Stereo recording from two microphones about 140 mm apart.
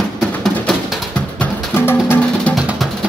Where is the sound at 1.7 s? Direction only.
15° left (ahead or behind).